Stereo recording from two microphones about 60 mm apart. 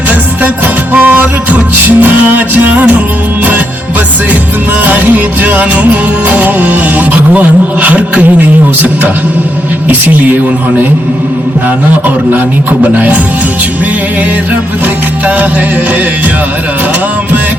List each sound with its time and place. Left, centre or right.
0.9 s music: right
4.8 s music: right
9.9 s music: right